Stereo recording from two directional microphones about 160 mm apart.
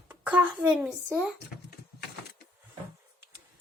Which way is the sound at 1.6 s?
90° left.